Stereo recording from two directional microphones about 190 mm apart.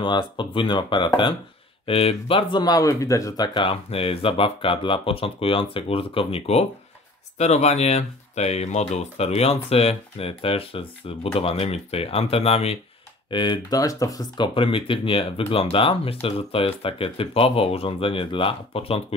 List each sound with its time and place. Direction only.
0.0 s speech: 25° left (ahead or behind)